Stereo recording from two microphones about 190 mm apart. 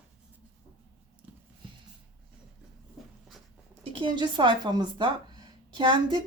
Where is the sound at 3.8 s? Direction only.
25° right (ahead or behind).